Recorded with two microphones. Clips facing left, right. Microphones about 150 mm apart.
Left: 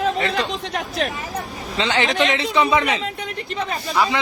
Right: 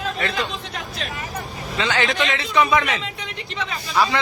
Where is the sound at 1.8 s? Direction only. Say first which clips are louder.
Left 2 dB; 25° left (ahead or behind).